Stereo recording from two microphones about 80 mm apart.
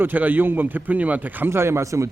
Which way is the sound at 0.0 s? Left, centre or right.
Right.